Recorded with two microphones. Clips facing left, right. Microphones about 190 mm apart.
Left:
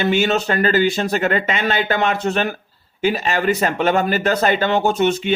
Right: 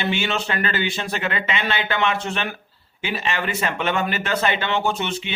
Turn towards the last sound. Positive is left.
turn(degrees=45)  # may be behind; listen again after turning